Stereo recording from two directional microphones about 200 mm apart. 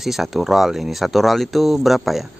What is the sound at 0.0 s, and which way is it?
Speech, centre (ahead or behind).